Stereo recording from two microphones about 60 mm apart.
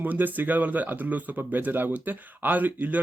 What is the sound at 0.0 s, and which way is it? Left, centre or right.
Speech, right.